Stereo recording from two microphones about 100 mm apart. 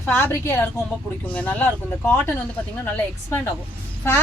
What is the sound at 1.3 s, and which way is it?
Speech, 15° left (ahead or behind).